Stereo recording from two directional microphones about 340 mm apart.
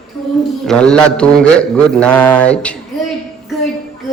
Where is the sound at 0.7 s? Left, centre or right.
Centre.